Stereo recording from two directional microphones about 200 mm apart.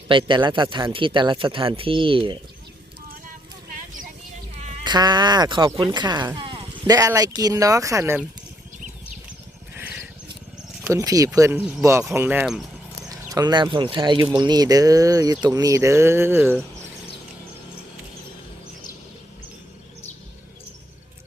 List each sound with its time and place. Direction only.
0.1 s speech: 25° right (ahead or behind)
4.8 s speech: 20° right (ahead or behind)
9.7 s a sound: 10° right (ahead or behind)
10.8 s speech: 15° right (ahead or behind)
13.1 s speech: 20° right (ahead or behind)